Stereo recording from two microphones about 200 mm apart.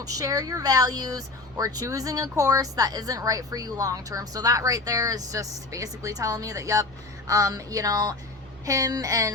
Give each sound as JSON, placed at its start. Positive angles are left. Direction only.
{"t": 0.2, "sound": "speech", "side_deg": -15}